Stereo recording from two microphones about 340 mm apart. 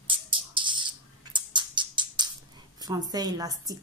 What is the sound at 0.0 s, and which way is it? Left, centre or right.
Typing, centre.